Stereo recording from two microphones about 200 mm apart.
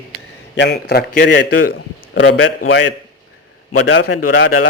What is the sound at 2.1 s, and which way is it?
Speech, 75° left (ahead or behind).